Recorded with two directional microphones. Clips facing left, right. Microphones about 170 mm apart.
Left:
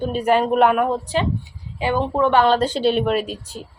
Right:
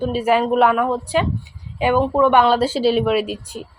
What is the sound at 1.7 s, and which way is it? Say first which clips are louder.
A woman's voice: right 4 dB; 15° right (ahead or behind).